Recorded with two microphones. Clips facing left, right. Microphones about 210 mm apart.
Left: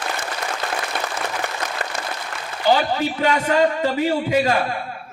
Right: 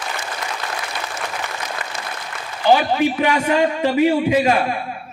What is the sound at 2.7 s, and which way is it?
A man's voice, 15° right (ahead or behind).